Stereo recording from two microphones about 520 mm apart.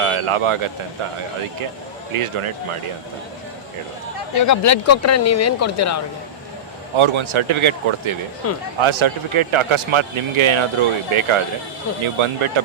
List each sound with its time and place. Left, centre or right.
0.0 s speech: right
2.1 s speech: right
4.4 s speech: left
6.9 s a man's voice: right
8.4 s speech: left
8.8 s a man's voice: right